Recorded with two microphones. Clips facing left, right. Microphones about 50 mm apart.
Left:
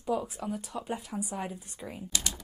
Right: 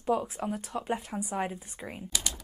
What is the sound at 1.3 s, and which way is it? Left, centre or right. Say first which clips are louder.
Speech: right 4 dB; right.